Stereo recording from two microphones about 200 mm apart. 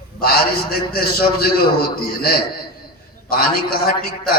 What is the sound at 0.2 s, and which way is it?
A man's voice, 50° left (ahead or behind).